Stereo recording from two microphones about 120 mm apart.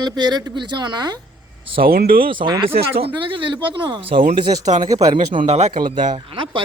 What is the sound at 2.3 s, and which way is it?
A man's voice, 40° right (ahead or behind).